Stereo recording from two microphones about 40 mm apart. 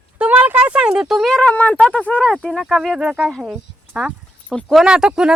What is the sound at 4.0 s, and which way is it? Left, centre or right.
Speech, centre.